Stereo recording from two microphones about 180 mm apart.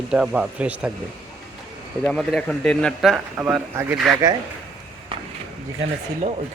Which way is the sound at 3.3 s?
10° right (ahead or behind).